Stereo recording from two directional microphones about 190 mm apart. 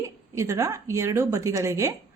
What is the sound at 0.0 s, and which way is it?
A woman's voice, 15° right (ahead or behind).